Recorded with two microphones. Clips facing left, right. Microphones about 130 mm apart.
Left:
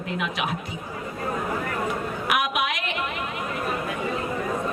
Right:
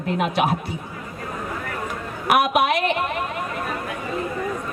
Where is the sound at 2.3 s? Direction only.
40° right (ahead or behind).